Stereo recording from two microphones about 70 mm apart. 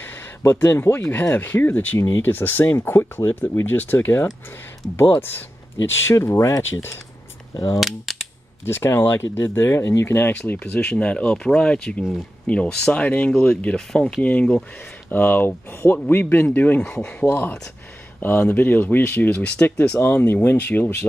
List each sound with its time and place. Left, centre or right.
0.0 s a sound: left
1.1 s speech: left
3.6 s speech: left
6.6 s speech: left
7.5 s a sound: left
7.8 s cap gun: centre
8.6 s speech: left
10.6 s speech: centre
13.7 s speech: centre
14.2 s speech: centre
15.0 s speech: left
17.3 s speech: left